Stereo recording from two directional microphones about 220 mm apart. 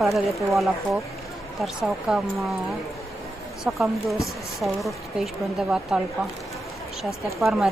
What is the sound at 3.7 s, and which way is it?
A woman's voice, 5° right (ahead or behind).